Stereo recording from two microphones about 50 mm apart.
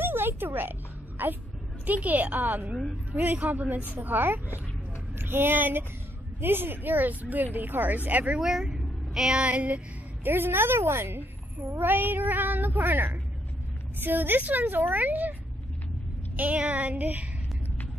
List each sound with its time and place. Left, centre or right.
0.0 s music: right
1.9 s a woman's voice: right
8.4 s a woman's voice: centre
9.5 s speech: right
10.2 s a woman's voice: right
11.7 s speech: right
16.3 s speech: right